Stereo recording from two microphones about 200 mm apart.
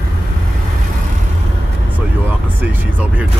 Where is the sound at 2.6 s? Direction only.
10° right (ahead or behind).